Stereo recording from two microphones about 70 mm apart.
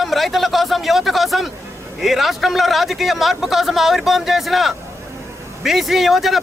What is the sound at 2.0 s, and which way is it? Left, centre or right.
A man's voice, centre.